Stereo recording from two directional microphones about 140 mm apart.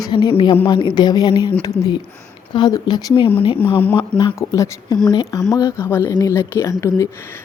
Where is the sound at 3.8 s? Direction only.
10° left (ahead or behind).